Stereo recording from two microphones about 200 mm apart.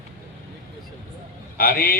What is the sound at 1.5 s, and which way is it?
Speech, 50° left (ahead or behind).